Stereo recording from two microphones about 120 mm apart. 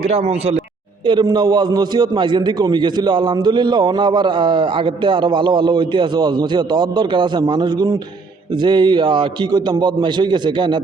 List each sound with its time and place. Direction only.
0.1 s a man's voice: 55° right (ahead or behind)
1.0 s a man's voice: 40° right (ahead or behind)